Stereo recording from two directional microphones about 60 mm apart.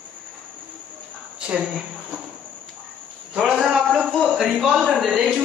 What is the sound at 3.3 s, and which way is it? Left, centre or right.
Cricket, centre.